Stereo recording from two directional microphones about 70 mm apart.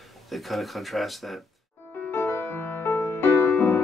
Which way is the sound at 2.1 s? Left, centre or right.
Left.